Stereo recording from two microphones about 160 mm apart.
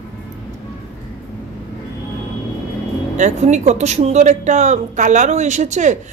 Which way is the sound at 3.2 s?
45° right (ahead or behind).